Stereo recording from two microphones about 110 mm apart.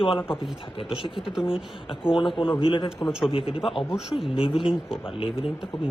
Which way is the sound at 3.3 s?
55° left (ahead or behind).